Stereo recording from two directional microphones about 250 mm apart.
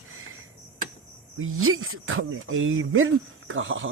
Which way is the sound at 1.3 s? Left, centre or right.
Right.